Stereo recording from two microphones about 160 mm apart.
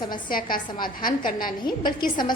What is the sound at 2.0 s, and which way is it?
Speech, 30° left (ahead or behind).